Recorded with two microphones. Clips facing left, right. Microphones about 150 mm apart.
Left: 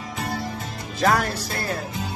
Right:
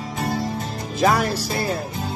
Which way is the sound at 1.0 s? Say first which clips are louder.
Right 2 dB; 5° right (ahead or behind).